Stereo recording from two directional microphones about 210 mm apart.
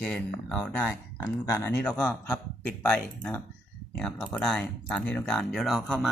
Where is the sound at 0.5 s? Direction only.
5° left (ahead or behind).